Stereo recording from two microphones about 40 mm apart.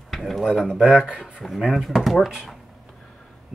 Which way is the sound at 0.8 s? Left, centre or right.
Right.